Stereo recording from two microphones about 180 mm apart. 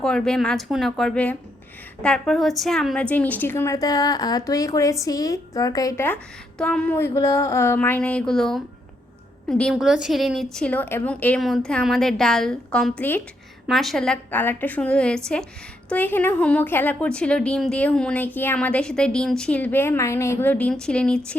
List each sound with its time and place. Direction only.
0.0 s a woman's voice: 5° left (ahead or behind)
6.6 s a woman's voice: 5° left (ahead or behind)